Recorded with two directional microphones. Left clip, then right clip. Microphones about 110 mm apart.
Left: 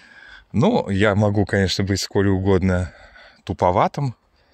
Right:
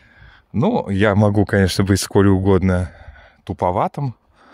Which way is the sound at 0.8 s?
30° right (ahead or behind).